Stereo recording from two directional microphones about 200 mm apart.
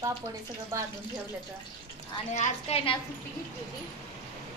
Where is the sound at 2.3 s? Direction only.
35° left (ahead or behind).